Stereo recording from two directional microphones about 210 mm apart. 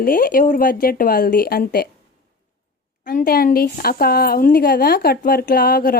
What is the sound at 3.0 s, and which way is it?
Speech, 45° left (ahead or behind).